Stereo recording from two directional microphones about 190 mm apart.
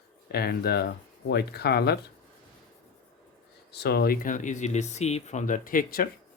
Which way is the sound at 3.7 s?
60° left (ahead or behind).